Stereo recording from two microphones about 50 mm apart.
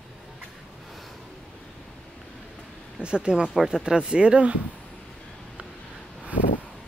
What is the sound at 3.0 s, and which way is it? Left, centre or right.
Speech, centre.